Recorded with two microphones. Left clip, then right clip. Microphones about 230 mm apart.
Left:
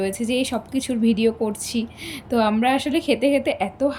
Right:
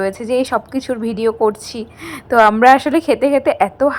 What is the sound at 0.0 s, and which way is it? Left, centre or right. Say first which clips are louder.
A woman's voice: right 6 dB; centre.